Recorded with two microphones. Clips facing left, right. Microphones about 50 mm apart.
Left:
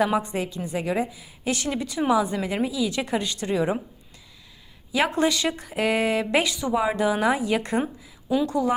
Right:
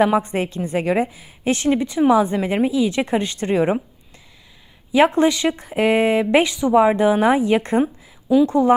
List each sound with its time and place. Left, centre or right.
0.0 s a woman's voice: right
4.9 s a woman's voice: right